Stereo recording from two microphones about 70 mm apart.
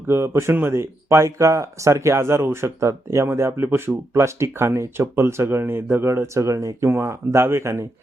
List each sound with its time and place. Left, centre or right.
0.1 s speech: right